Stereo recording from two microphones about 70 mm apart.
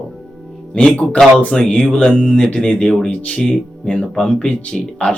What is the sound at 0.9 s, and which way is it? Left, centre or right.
Speech, centre.